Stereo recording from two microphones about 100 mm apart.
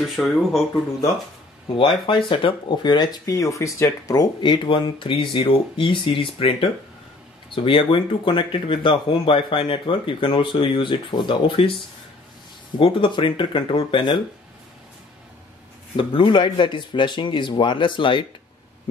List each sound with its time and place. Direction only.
0.1 s speech: centre (ahead or behind)
2.0 s speech: 60° left (ahead or behind)
16.0 s speech: 60° left (ahead or behind)